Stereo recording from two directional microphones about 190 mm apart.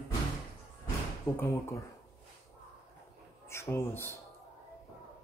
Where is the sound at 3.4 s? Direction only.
15° left (ahead or behind).